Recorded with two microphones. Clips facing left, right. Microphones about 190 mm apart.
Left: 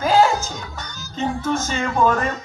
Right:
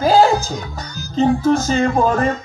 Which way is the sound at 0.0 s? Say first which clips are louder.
Right 4 dB; 35° right (ahead or behind).